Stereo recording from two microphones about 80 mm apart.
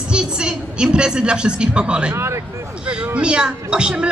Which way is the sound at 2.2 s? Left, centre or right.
Right.